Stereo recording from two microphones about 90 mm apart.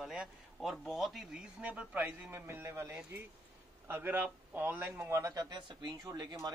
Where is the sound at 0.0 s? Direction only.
5° right (ahead or behind); by 5.1 s 20° right (ahead or behind).